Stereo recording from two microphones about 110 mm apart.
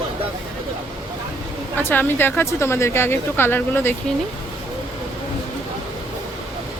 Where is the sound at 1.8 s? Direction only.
20° left (ahead or behind).